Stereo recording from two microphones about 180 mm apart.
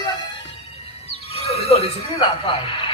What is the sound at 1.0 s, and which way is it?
Speech, 35° left (ahead or behind).